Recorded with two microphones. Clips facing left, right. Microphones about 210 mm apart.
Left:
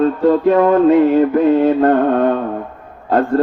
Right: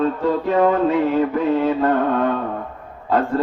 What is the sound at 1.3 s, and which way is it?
Mantra, 45° left (ahead or behind).